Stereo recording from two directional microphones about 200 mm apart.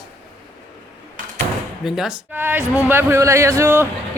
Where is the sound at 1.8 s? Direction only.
5° right (ahead or behind).